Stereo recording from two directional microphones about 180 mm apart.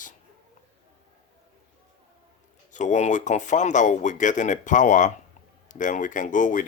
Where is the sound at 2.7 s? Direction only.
45° left (ahead or behind).